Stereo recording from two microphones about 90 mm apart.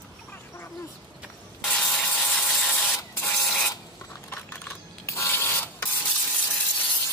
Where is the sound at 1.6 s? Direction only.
10° left (ahead or behind).